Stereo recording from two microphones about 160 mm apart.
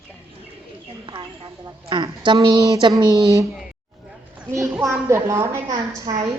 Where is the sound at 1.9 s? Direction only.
30° right (ahead or behind).